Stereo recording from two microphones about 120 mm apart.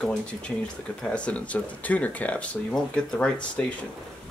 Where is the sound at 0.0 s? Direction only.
5° left (ahead or behind).